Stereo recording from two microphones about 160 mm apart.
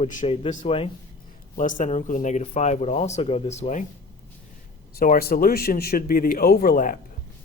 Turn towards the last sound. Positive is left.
turn(degrees=60)  # may be behind; listen again after turning